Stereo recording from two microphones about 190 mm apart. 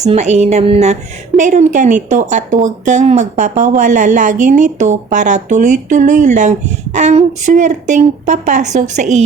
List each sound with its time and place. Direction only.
0.0 s a woman's voice: 35° right (ahead or behind)